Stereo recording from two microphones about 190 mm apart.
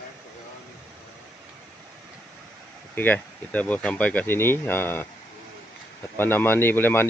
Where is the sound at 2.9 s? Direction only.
10° left (ahead or behind).